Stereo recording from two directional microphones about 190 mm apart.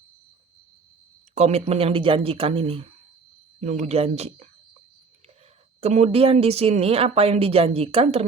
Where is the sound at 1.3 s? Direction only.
35° right (ahead or behind).